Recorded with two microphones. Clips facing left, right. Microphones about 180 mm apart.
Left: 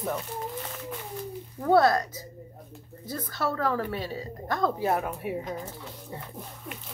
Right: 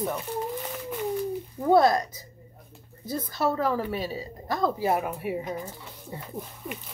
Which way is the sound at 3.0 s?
15° right (ahead or behind).